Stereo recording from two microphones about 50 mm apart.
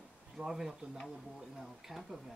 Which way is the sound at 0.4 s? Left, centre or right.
Centre.